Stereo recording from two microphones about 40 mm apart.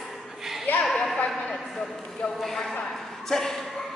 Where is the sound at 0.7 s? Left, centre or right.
Left.